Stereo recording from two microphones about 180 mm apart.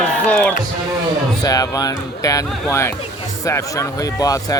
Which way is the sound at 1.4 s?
20° left (ahead or behind).